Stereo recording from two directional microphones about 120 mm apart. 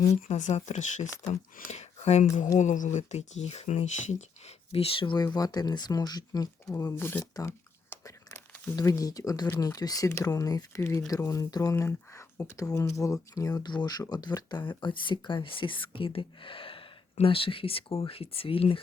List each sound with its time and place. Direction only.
0.3 s speech: 80° left
1.2 s speech: 75° left (ahead or behind)
2.6 s speech: 90° left; by 4.5 s 70° left (ahead or behind)
4.7 s speech: 50° left (ahead or behind); by 6.9 s 30° left (ahead or behind)
6.9 s speech: 20° left (ahead or behind)
7.3 s a sound: 25° left (ahead or behind)
8.7 s speech: 25° left (ahead or behind); by 18.8 s 50° left (ahead or behind)